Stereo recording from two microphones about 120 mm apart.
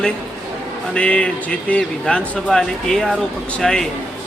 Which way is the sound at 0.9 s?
10° left (ahead or behind).